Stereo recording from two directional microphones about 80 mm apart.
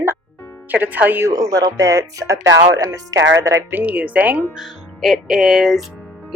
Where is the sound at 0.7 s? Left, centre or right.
Right.